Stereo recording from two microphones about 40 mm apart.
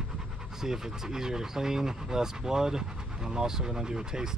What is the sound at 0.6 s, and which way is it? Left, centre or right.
Speech, centre.